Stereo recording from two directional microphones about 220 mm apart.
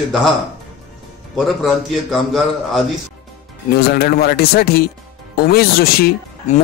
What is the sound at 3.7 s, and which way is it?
Speech, 45° left (ahead or behind).